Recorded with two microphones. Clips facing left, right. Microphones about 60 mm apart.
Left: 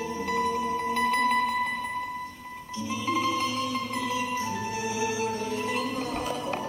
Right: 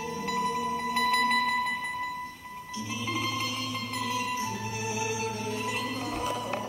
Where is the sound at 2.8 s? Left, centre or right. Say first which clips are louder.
Left 6 dB; left.